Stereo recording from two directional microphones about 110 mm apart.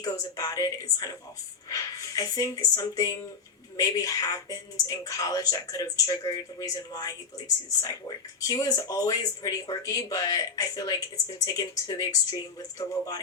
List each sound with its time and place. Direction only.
0.0 s speech: 35° left (ahead or behind)